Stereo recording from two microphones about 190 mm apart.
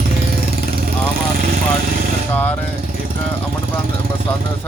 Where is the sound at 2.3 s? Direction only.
10° left (ahead or behind).